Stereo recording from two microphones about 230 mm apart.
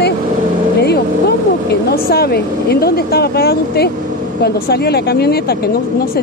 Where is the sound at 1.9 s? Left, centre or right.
Left.